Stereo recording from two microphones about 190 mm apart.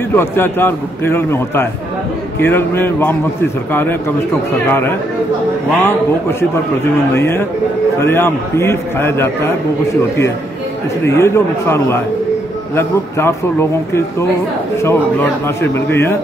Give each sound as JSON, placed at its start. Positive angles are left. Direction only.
{"t": 0.1, "sound": "a man's voice", "side_deg": 10}
{"t": 4.6, "sound": "a man's voice", "side_deg": 10}
{"t": 11.1, "sound": "a man's voice", "side_deg": 15}